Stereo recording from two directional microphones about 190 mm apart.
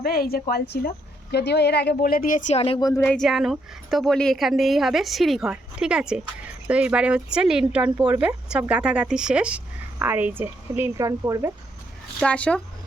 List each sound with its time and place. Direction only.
0.0 s a woman's voice: 50° left (ahead or behind); by 2.8 s 30° left (ahead or behind)
2.8 s a woman's voice: 15° left (ahead or behind)
3.2 s speech: centre (ahead or behind)
12.2 s a woman's voice: 5° left (ahead or behind)